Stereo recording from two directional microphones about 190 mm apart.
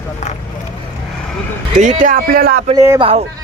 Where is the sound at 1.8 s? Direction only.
40° right (ahead or behind).